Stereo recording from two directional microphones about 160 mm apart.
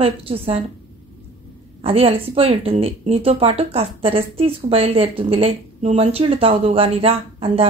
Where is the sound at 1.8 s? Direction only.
40° right (ahead or behind).